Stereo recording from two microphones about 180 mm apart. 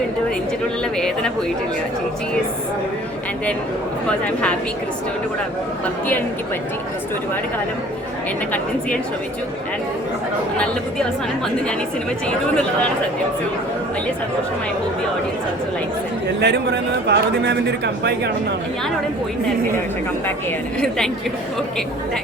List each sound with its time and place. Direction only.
0.9 s speech: 5° left (ahead or behind)
4.3 s speech: 5° left (ahead or behind)
16.4 s a man's voice: 65° right (ahead or behind)